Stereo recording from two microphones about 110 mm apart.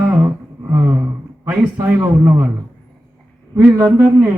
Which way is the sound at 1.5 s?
15° right (ahead or behind).